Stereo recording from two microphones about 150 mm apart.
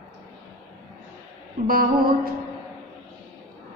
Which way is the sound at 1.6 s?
75° right (ahead or behind).